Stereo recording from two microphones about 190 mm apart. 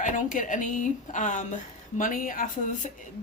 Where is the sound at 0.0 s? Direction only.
45° left (ahead or behind).